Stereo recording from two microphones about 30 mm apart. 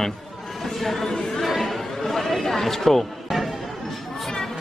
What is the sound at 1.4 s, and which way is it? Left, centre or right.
Chatter, centre.